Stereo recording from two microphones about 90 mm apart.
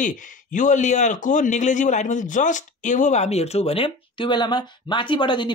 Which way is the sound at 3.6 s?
90° left.